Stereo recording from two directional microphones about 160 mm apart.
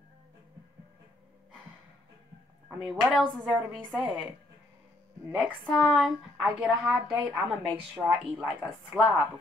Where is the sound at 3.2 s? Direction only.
5° left (ahead or behind).